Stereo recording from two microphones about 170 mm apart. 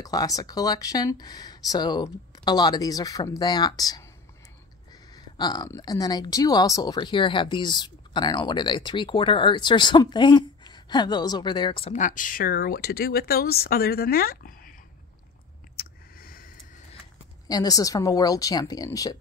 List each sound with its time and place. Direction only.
0.0 s speech: 20° left (ahead or behind)
5.1 s speech: 25° left (ahead or behind)
11.9 s speech: 50° left (ahead or behind)
15.7 s a sound: 60° left (ahead or behind)
17.5 s speech: 20° left (ahead or behind)